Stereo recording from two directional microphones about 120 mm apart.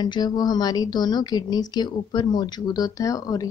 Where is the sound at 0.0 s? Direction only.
35° left (ahead or behind).